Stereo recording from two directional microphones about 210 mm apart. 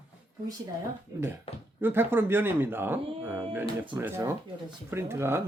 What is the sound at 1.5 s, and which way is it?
Speech, 25° left (ahead or behind).